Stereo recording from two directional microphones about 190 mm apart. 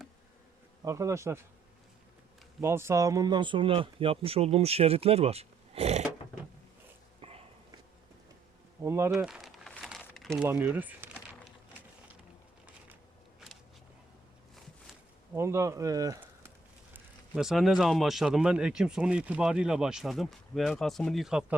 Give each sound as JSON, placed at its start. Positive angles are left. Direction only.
{"t": 0.9, "sound": "speech", "side_deg": -15}
{"t": 2.6, "sound": "speech", "side_deg": -15}
{"t": 7.2, "sound": "dog", "side_deg": -30}
{"t": 8.8, "sound": "a sound", "side_deg": -15}
{"t": 10.5, "sound": "speech", "side_deg": -10}
{"t": 15.4, "sound": "speech", "side_deg": -15}
{"t": 16.9, "sound": "speech", "side_deg": -5}